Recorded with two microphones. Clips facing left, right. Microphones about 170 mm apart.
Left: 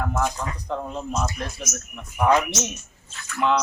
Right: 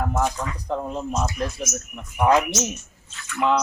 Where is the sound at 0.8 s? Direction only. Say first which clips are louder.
Right 2 dB; 15° right (ahead or behind).